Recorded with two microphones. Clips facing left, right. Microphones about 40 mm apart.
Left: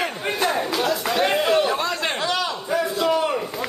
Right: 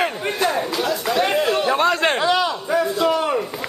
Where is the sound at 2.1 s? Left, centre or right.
Centre.